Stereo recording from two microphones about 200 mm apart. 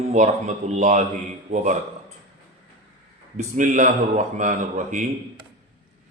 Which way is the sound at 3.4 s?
40° right (ahead or behind).